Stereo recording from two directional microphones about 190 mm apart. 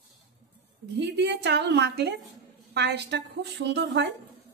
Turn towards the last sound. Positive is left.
turn(degrees=-65)  # may be behind; listen again after turning